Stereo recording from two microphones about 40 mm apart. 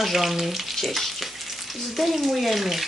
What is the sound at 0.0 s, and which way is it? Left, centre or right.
Frying, centre.